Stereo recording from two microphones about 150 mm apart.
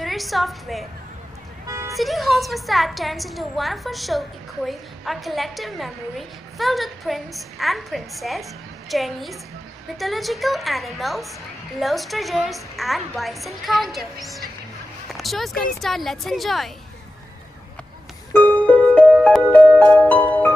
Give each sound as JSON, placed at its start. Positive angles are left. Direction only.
{"t": 0.0, "sound": "a woman's voice", "side_deg": 0}
{"t": 1.7, "sound": "vehicle", "side_deg": -20}
{"t": 2.0, "sound": "a woman's voice", "side_deg": 0}
{"t": 18.3, "sound": "music", "side_deg": 10}